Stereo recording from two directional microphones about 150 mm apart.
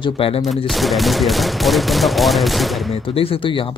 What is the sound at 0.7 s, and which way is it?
Speech, centre (ahead or behind).